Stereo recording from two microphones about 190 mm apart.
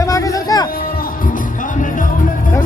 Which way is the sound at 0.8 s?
45° left (ahead or behind).